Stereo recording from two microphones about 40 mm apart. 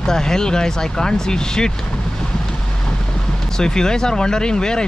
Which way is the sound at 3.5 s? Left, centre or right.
Centre.